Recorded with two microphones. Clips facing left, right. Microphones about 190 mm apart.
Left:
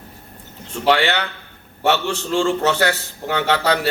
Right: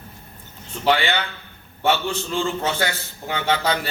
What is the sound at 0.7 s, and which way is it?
A man's voice, 70° left (ahead or behind).